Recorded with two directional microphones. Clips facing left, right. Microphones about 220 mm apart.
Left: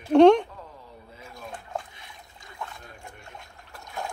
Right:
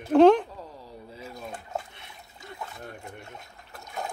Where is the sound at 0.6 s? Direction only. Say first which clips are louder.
Right 3 dB; 35° right (ahead or behind).